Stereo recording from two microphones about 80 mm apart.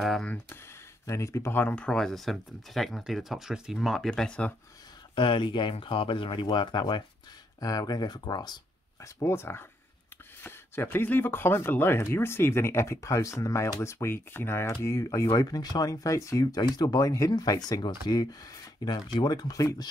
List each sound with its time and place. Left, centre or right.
0.0 s speech: centre
1.0 s speech: left
1.6 s speech: left
1.9 s speech: centre
5.1 s speech: left
7.6 s speech: left
9.0 s speech: left
16.7 s speech: left